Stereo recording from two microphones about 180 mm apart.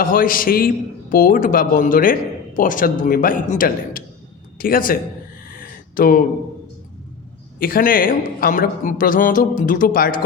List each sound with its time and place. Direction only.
0.0 s a man's voice: 50° left (ahead or behind)
5.5 s a sound: 50° left (ahead or behind)
7.6 s a man's voice: 50° left (ahead or behind)